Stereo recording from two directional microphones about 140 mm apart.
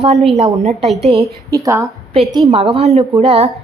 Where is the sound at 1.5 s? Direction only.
20° right (ahead or behind).